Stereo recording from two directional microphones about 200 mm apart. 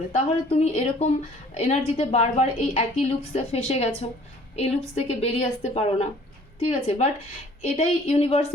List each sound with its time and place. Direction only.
0.1 s a woman's voice: 30° left (ahead or behind)